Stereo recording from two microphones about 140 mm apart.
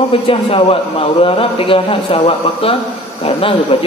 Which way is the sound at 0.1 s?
40° left (ahead or behind).